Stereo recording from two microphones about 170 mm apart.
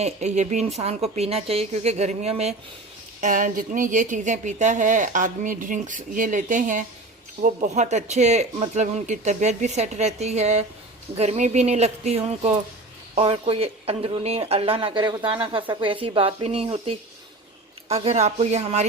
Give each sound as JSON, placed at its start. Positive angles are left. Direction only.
{"t": 0.0, "sound": "speech", "side_deg": -40}
{"t": 3.2, "sound": "a woman's voice", "side_deg": -50}